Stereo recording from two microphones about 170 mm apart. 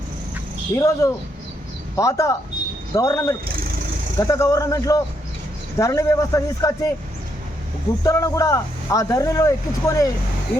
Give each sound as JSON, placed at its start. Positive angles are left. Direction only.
{"t": 0.7, "sound": "speech", "side_deg": 20}
{"t": 8.0, "sound": "speech", "side_deg": 20}